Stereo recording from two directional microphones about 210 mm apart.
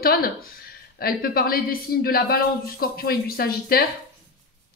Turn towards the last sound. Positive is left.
turn(degrees=45)  # may be behind; listen again after turning